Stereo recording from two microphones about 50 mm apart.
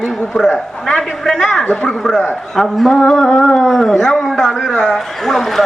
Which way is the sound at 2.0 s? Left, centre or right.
Centre.